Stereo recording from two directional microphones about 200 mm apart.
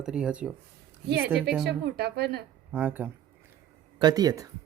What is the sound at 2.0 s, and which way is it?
Speech, 55° right (ahead or behind).